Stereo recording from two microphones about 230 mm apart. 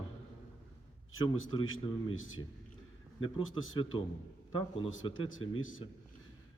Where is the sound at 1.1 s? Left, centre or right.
Left.